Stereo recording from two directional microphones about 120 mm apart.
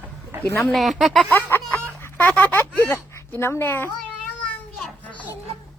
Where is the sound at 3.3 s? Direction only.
20° left (ahead or behind).